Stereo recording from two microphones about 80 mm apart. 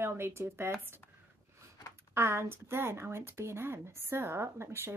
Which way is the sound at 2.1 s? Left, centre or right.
Right.